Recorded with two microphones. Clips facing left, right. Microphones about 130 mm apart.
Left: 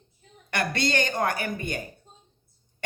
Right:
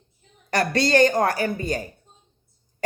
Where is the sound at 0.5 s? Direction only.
35° right (ahead or behind).